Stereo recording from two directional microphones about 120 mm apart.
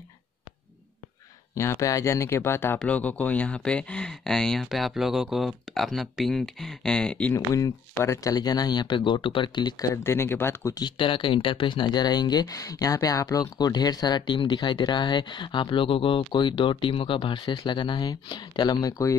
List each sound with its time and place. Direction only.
1.5 s speech: 25° left (ahead or behind); by 7.3 s 10° left (ahead or behind)
7.3 s speech: 25° left (ahead or behind)
10.8 s speech: 45° left (ahead or behind)